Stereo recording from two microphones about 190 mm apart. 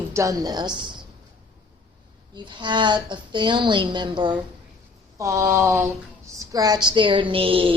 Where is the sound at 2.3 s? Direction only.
25° right (ahead or behind).